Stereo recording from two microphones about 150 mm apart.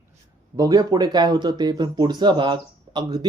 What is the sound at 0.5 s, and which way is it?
Speech, 25° right (ahead or behind).